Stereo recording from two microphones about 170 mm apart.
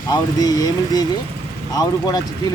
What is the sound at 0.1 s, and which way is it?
Speech, 25° left (ahead or behind).